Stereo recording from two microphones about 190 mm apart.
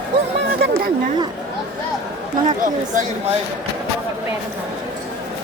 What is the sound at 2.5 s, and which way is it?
Speech, 45° right (ahead or behind).